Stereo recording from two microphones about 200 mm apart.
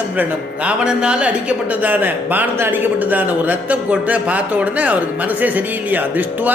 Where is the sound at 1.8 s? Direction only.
10° right (ahead or behind).